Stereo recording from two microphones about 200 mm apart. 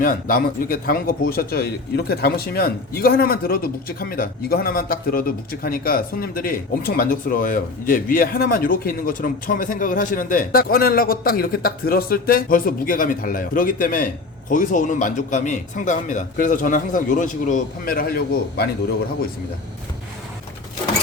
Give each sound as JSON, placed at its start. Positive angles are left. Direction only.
{"t": 0.0, "sound": "a man's voice", "side_deg": 45}